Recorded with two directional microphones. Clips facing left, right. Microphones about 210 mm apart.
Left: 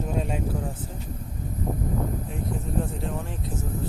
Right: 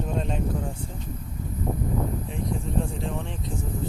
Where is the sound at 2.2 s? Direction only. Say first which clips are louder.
Right 1 dB; 5° left (ahead or behind).